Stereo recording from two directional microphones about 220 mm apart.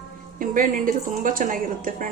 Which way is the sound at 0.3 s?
40° right (ahead or behind).